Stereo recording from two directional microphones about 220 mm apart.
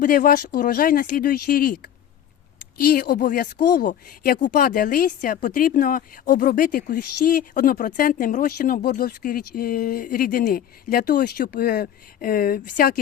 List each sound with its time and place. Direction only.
0.0 s speech: 40° left (ahead or behind)